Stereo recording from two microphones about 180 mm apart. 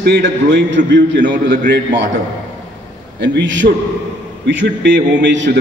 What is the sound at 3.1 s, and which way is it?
Speech, 85° right.